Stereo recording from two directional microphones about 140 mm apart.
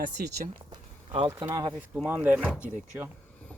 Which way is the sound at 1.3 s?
20° right (ahead or behind).